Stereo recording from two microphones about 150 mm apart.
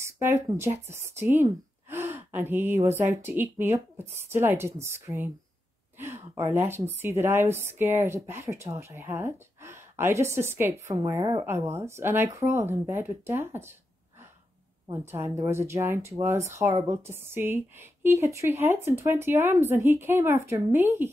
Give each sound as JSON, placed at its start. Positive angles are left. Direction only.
{"t": 0.0, "sound": "a woman's voice", "side_deg": -20}
{"t": 14.9, "sound": "a woman's voice", "side_deg": -20}